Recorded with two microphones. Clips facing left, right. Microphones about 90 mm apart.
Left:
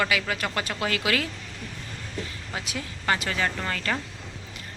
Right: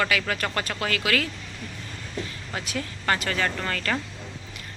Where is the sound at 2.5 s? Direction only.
15° left (ahead or behind).